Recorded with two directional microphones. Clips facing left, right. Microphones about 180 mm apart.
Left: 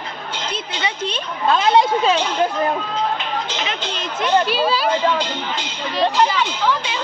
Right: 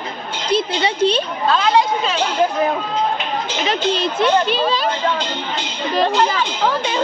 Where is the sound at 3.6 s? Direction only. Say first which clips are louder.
Right 7 dB; 35° right (ahead or behind).